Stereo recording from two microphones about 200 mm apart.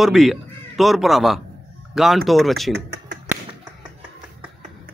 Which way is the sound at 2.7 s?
55° right (ahead or behind).